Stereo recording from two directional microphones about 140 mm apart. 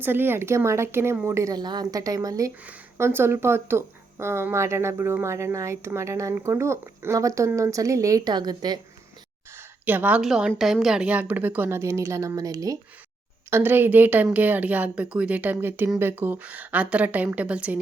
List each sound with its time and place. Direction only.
0.0 s speech: 15° right (ahead or behind)
9.6 s a woman's voice: 15° right (ahead or behind)